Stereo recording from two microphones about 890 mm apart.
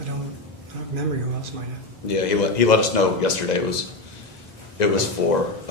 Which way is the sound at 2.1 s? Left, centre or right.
Left.